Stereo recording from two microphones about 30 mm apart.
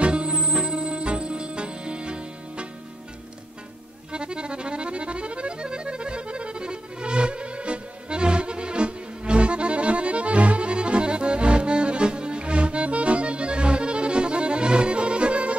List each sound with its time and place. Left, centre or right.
0.0 s music: right
4.1 s accordion: right